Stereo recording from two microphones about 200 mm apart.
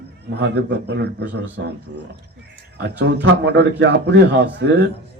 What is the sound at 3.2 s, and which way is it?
A man's voice, 55° right (ahead or behind).